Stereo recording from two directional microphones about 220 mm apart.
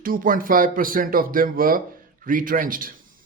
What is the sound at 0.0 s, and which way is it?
Speech, 40° right (ahead or behind).